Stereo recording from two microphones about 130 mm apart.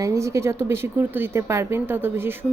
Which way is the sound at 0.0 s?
25° right (ahead or behind).